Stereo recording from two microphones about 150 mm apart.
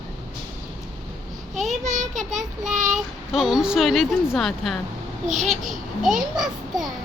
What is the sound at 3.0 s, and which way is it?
Speech, centre (ahead or behind).